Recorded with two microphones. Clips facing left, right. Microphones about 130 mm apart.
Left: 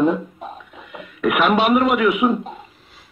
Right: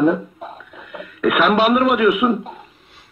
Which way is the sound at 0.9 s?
Centre (ahead or behind).